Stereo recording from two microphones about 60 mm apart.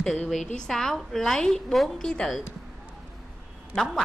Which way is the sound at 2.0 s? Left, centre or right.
Centre.